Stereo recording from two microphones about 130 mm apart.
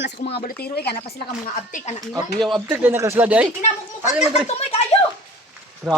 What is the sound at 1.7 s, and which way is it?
Speech, 80° left.